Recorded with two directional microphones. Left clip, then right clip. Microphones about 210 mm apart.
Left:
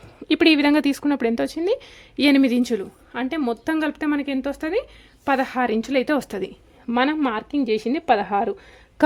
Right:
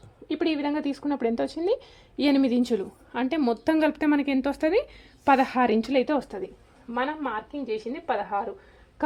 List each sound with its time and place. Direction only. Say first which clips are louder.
0.3 s speech: left 10 dB; 35° left (ahead or behind); by 2.9 s 15° left (ahead or behind)
3.1 s speech: left 1 dB; centre (ahead or behind)
6.1 s a woman's voice: left 4 dB; 30° left (ahead or behind)
6.9 s speech: left 7 dB; 50° left (ahead or behind)